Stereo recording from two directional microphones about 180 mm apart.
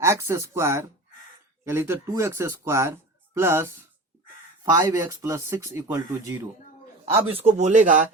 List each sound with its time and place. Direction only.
0.0 s speech: 15° right (ahead or behind)
7.3 s speech: 35° right (ahead or behind)